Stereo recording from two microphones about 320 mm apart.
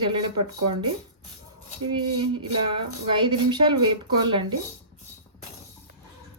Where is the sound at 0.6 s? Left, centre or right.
Right.